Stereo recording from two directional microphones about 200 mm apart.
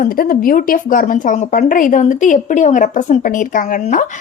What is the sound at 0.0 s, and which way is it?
Speech, 45° left (ahead or behind).